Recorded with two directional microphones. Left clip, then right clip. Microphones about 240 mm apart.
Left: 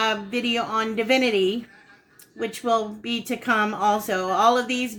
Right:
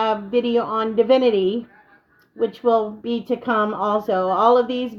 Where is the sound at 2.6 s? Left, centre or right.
Right.